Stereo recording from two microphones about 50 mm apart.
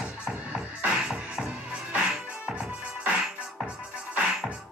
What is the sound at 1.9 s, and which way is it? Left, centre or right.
Music, right.